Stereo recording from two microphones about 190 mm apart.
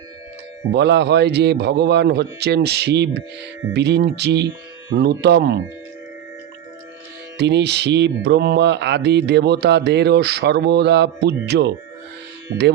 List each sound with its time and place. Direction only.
0.7 s speech: 65° right (ahead or behind)
7.3 s speech: 65° right (ahead or behind)